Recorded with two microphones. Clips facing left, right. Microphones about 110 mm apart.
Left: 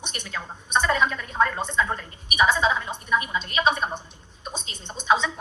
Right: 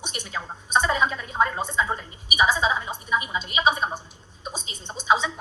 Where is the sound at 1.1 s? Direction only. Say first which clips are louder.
Even; 20° right (ahead or behind).